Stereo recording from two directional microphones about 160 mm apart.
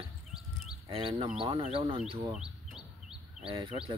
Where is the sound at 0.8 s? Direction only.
35° right (ahead or behind).